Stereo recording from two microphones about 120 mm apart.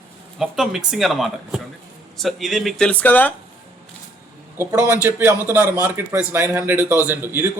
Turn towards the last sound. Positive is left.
turn(degrees=-20)  # may be behind; listen again after turning